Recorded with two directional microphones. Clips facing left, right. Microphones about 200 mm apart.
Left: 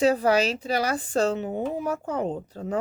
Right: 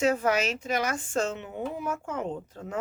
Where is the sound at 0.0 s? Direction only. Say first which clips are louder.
Left 4 dB; 35° left (ahead or behind).